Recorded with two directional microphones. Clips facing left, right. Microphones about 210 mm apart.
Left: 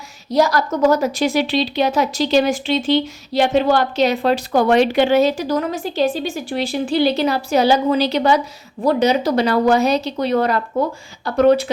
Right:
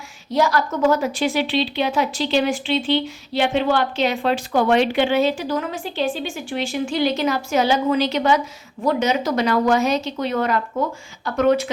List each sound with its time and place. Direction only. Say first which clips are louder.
0.3 s a woman's voice: left 3 dB; 40° left (ahead or behind)